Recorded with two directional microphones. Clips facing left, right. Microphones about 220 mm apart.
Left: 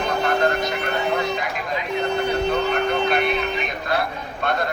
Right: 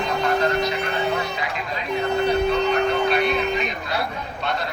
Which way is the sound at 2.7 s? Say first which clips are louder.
Right 1 dB; 50° left (ahead or behind).